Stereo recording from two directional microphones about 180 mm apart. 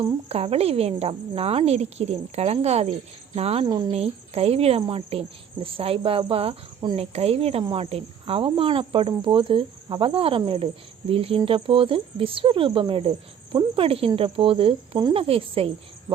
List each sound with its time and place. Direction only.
0.0 s speech: 35° right (ahead or behind)
3.9 s speech: 35° right (ahead or behind)